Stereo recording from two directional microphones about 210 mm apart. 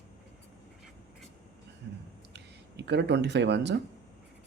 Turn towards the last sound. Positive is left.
turn(degrees=-55)  # may be behind; listen again after turning